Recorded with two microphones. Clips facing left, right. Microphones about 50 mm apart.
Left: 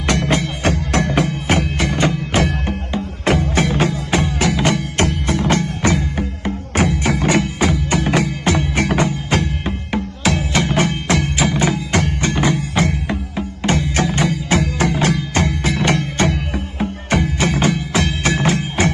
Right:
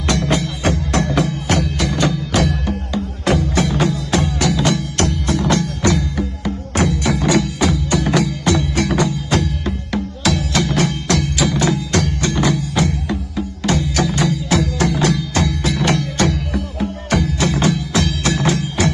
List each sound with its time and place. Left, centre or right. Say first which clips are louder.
0.1 s music: left 1 dB; left